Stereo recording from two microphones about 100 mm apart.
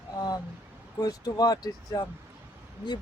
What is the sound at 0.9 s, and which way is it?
Speech, 40° left (ahead or behind).